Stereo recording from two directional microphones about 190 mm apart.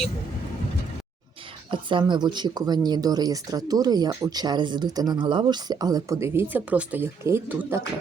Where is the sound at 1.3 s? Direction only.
25° right (ahead or behind).